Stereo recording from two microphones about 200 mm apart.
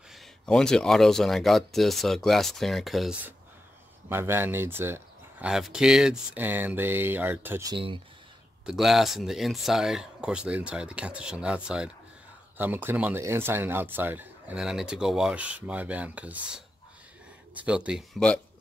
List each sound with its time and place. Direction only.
0.1 s speech: 5° left (ahead or behind)
7.7 s speech: 25° right (ahead or behind)
8.6 s speech: centre (ahead or behind)
17.6 s speech: 5° right (ahead or behind)